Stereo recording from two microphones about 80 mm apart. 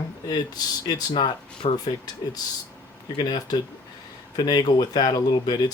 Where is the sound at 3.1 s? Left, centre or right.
Left.